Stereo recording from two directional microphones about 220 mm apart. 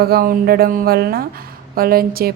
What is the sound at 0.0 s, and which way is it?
A woman's voice, 45° right (ahead or behind).